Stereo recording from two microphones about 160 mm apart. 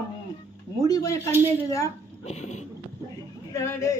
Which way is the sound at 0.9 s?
20° left (ahead or behind).